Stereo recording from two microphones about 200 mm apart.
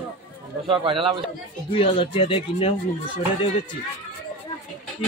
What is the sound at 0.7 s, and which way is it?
Speech, 25° right (ahead or behind).